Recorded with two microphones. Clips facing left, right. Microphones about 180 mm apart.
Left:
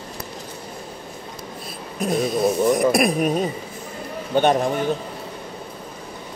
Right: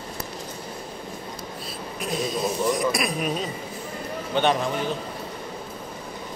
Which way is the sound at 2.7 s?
55° left (ahead or behind).